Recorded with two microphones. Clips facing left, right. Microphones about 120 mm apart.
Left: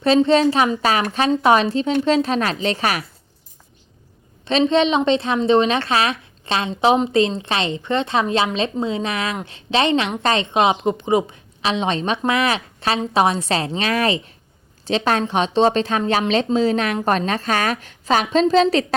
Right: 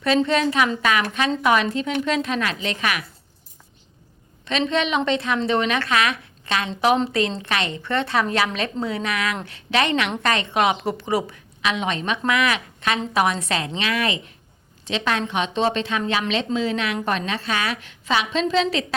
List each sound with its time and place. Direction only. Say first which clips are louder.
0.0 s a woman's voice: left 5 dB; 30° left (ahead or behind)
4.7 s a woman's voice: left 4 dB; 30° left (ahead or behind)